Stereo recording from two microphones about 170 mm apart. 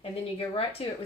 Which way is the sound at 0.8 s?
35° left (ahead or behind).